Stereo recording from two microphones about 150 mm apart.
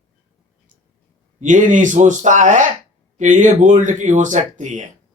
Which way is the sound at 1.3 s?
60° right (ahead or behind).